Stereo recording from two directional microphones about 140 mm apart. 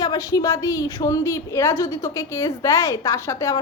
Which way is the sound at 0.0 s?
25° left (ahead or behind).